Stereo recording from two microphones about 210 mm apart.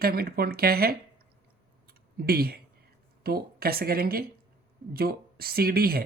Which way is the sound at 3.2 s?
45° right (ahead or behind).